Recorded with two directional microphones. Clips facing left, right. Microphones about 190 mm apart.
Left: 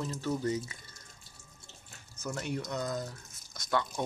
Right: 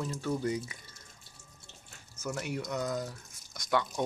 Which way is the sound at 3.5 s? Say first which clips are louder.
Right 1 dB; 15° right (ahead or behind).